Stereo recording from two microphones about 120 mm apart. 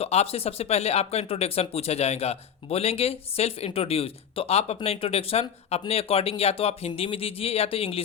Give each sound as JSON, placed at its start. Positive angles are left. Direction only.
{"t": 0.0, "sound": "speech", "side_deg": 60}